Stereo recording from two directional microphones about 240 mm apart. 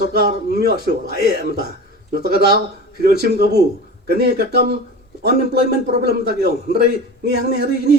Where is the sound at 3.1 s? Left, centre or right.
Left.